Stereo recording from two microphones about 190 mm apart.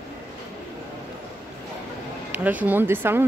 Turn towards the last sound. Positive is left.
turn(degrees=-10)  # may be behind; listen again after turning